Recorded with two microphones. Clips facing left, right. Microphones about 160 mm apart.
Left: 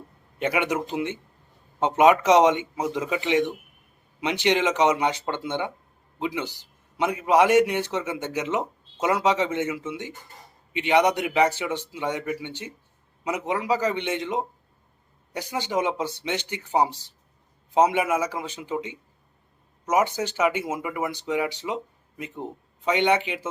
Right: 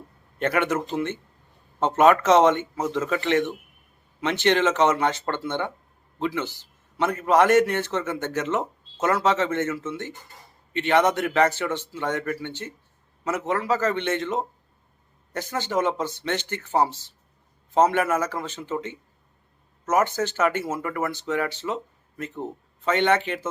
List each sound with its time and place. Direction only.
0.3 s a man's voice: 10° left (ahead or behind)